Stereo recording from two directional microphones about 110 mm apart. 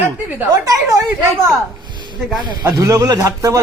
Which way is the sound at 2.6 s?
30° right (ahead or behind).